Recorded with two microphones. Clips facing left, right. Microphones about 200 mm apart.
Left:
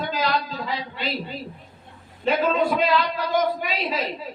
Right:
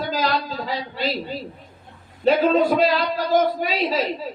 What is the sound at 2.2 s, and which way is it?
A woman's voice, 35° right (ahead or behind).